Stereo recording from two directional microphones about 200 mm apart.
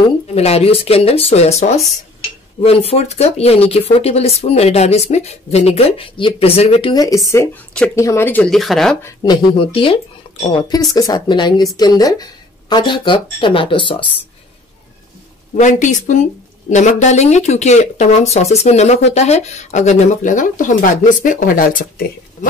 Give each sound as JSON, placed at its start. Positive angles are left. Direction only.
{"t": 0.3, "sound": "a woman's voice", "side_deg": 30}
{"t": 7.2, "sound": "speech", "side_deg": 10}
{"t": 9.0, "sound": "speech", "side_deg": 20}
{"t": 15.6, "sound": "a woman's voice", "side_deg": 40}